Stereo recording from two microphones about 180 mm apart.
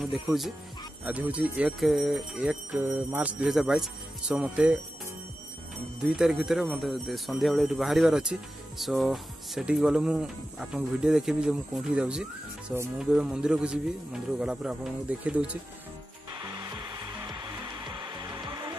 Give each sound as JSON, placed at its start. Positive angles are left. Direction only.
{"t": 0.0, "sound": "speech", "side_deg": 0}
{"t": 6.0, "sound": "speech", "side_deg": -5}
{"t": 16.3, "sound": "hair dryer", "side_deg": -20}